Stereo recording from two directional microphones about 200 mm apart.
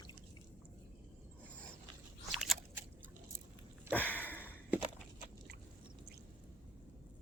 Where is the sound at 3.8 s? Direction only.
10° left (ahead or behind).